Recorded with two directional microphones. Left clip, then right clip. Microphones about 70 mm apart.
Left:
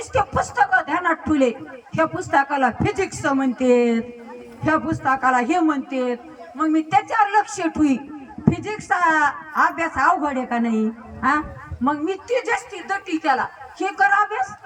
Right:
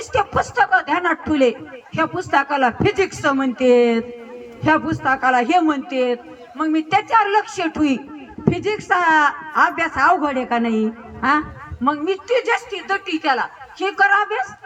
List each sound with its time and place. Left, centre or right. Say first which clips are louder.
0.1 s a man's voice: right 2 dB; right